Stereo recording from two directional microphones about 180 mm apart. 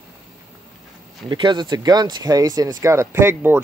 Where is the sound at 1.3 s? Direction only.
25° right (ahead or behind).